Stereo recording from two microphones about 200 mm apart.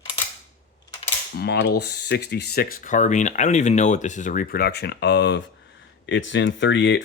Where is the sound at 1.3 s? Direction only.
55° left (ahead or behind).